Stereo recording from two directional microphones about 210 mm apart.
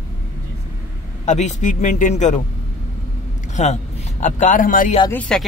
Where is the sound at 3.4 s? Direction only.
35° left (ahead or behind).